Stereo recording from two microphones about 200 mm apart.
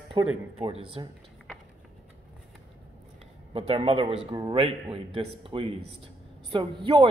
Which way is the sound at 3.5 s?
30° right (ahead or behind).